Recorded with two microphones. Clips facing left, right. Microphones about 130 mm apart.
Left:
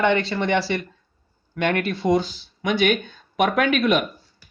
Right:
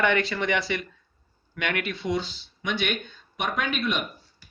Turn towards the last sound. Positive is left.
turn(degrees=60)  # may be behind; listen again after turning